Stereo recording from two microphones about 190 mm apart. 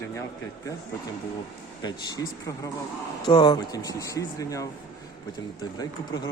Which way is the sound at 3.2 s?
25° left (ahead or behind).